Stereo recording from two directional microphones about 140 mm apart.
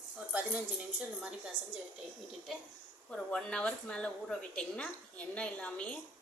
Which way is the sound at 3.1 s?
5° left (ahead or behind).